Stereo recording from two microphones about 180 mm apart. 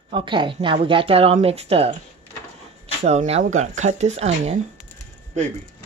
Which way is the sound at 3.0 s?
35° right (ahead or behind).